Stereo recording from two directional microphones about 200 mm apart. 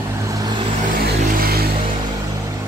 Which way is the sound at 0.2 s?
15° right (ahead or behind).